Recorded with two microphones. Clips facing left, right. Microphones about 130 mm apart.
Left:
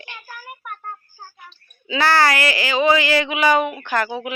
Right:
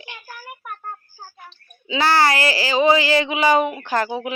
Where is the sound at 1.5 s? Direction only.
25° right (ahead or behind).